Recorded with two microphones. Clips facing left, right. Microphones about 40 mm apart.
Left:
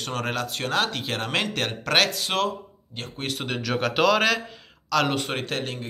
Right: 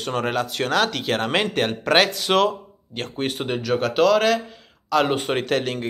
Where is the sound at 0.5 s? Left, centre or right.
Right.